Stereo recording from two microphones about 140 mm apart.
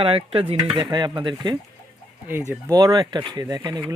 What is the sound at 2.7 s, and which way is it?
A man's voice, 25° right (ahead or behind).